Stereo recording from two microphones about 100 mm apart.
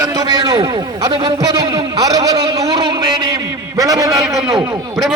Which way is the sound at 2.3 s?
65° right (ahead or behind).